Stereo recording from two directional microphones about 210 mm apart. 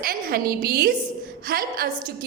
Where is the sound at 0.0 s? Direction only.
45° right (ahead or behind).